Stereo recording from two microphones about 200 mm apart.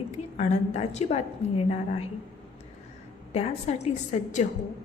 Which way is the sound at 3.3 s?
30° left (ahead or behind).